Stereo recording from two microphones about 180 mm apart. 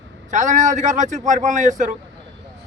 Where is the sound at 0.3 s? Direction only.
45° right (ahead or behind).